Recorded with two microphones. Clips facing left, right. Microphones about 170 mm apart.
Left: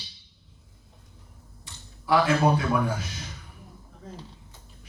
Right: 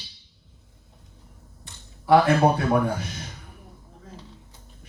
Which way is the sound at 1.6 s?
55° right (ahead or behind).